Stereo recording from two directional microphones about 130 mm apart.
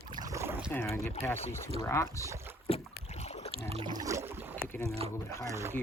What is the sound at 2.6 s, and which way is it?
Boat, 55° left (ahead or behind).